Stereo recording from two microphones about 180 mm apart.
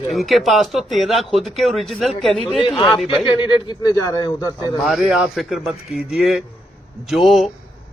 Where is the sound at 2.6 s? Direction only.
30° left (ahead or behind).